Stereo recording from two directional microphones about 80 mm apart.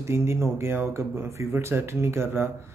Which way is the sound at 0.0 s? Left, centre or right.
Right.